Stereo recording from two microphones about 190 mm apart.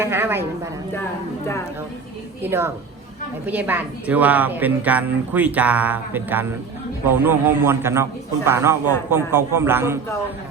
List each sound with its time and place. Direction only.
0.0 s a woman's voice: 10° right (ahead or behind)
2.4 s speech: 10° right (ahead or behind)